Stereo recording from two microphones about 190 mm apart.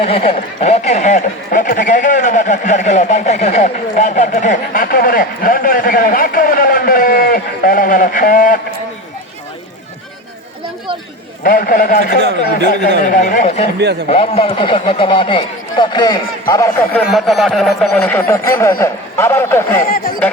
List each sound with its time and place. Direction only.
0.0 s speech: 30° left (ahead or behind); by 8.5 s 45° left (ahead or behind)
11.4 s a man's voice: 45° left (ahead or behind); by 17.0 s 15° left (ahead or behind)
17.1 s speech: centre (ahead or behind)
17.9 s a man's voice: 10° left (ahead or behind)